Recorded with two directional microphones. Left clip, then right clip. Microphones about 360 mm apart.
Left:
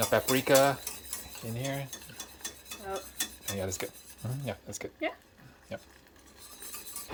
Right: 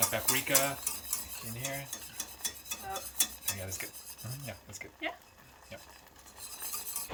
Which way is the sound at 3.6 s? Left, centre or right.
Centre.